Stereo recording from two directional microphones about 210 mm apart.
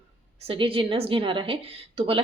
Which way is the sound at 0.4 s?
25° right (ahead or behind).